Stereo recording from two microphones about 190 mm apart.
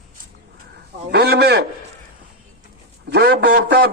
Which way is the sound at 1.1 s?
60° right (ahead or behind).